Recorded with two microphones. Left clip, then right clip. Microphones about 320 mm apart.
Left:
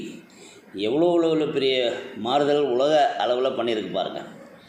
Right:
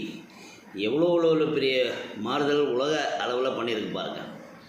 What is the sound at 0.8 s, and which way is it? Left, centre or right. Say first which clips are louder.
A man's voice: left 3 dB; centre.